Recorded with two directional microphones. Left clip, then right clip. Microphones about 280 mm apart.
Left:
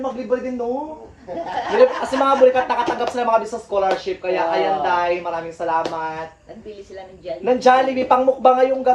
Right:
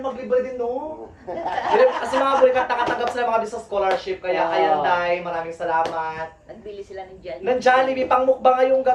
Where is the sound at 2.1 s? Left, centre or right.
Centre.